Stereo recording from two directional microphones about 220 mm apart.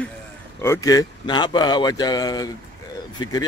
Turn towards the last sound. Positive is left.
turn(degrees=15)  # may be behind; listen again after turning